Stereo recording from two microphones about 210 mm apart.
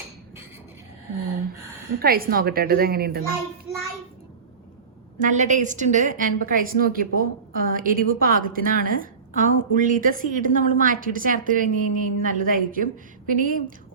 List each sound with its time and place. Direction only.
2.0 s a woman's voice: 45° right (ahead or behind)
5.2 s a woman's voice: 35° right (ahead or behind)